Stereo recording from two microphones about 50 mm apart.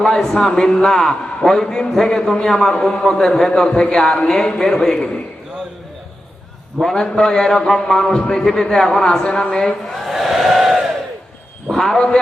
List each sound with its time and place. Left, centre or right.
0.2 s a man's voice: centre; by 4.3 s left
4.3 s a man's voice: centre
6.8 s a man's voice: centre
9.8 s crowd: centre
11.7 s a man's voice: centre